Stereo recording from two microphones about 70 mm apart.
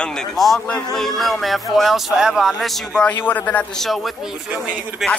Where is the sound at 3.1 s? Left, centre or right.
Left.